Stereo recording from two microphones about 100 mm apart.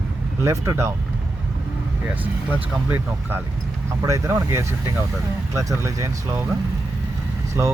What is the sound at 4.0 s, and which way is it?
Speech, 25° right (ahead or behind).